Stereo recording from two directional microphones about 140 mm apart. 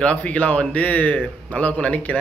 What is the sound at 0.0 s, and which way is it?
A man's voice, 10° left (ahead or behind).